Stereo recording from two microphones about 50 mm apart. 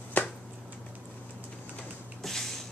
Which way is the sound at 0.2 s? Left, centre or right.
Left.